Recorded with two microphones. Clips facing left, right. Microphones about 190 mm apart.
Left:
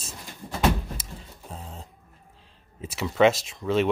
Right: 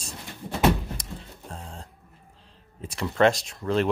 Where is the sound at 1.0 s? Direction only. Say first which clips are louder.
Right 3 dB; 5° left (ahead or behind).